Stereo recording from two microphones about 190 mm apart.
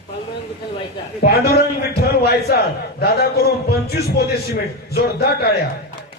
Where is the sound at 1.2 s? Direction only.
55° left (ahead or behind).